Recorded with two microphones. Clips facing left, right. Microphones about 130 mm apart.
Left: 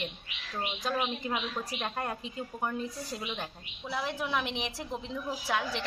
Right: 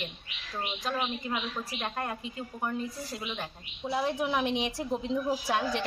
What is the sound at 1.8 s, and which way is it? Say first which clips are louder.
Speech: right 1 dB; centre (ahead or behind).